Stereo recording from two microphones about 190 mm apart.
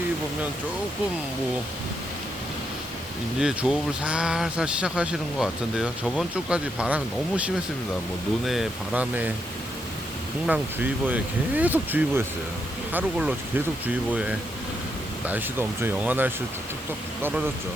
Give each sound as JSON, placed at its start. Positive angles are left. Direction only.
{"t": 3.4, "sound": "speech", "side_deg": -5}
{"t": 10.4, "sound": "speech", "side_deg": -10}